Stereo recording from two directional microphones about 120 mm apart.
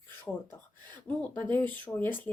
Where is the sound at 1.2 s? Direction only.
15° left (ahead or behind).